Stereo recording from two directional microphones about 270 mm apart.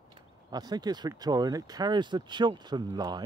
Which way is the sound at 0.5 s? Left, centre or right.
Centre.